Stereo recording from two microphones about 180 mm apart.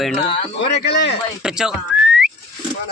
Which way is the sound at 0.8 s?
70° left (ahead or behind).